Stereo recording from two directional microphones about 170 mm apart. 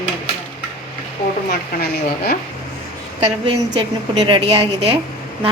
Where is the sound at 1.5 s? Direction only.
65° left (ahead or behind).